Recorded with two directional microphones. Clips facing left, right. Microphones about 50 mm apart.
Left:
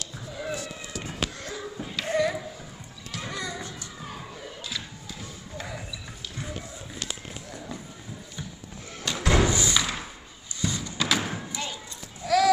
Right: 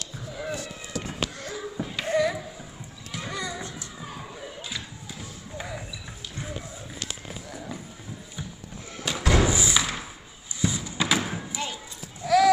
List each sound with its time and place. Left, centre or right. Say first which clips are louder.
0.3 s basketball bounce: even; centre
2.0 s a sound: right 1 dB; centre
5.6 s basketball bounce: right 1 dB; centre
6.3 s music: right 1 dB; centre
9.0 s slam: right 1 dB; centre
9.4 s thump: even; centre
10.6 s a sound: right 2 dB; centre
11.5 s basketball bounce: right 1 dB; centre
12.2 s a sound: right 2 dB; centre